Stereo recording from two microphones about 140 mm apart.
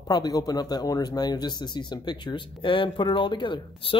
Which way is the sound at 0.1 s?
30° left (ahead or behind).